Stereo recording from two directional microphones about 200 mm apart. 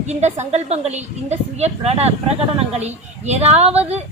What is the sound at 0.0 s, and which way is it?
A woman's voice, 35° right (ahead or behind).